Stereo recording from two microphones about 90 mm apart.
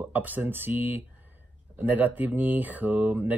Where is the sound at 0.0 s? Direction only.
20° right (ahead or behind).